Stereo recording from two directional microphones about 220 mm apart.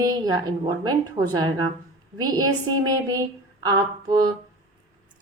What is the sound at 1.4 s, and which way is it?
A woman's voice, 20° right (ahead or behind).